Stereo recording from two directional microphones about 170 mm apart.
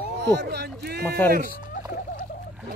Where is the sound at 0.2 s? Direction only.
90° right; by 1.0 s 70° right (ahead or behind).